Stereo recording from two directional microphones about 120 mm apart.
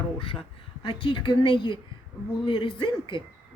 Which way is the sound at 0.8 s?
45° left (ahead or behind).